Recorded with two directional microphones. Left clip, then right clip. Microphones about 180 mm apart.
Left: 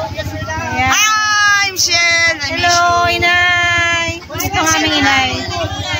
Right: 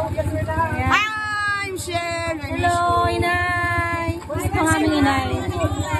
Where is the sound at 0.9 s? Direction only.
5° left (ahead or behind).